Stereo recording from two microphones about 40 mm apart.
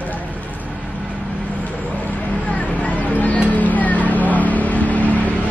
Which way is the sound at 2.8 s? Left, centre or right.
Left.